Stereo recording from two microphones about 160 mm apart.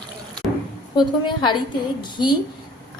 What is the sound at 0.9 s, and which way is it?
A woman's voice, 30° left (ahead or behind).